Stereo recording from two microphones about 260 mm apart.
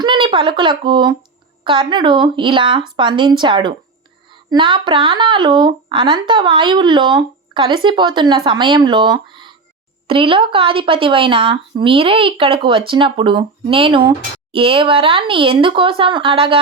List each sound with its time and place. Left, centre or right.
0.0 s speech: centre